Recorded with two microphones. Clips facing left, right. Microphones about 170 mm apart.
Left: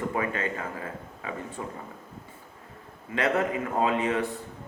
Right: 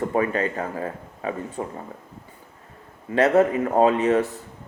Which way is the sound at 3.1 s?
40° right (ahead or behind).